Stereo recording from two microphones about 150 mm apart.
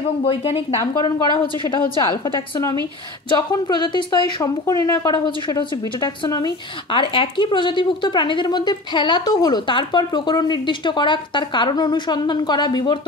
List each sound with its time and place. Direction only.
0.2 s a woman's voice: 35° left (ahead or behind)